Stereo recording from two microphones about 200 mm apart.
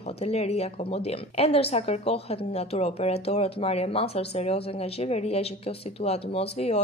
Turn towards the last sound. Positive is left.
turn(degrees=30)  # may be behind; listen again after turning